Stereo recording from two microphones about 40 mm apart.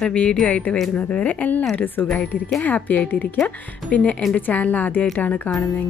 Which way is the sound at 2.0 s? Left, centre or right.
Left.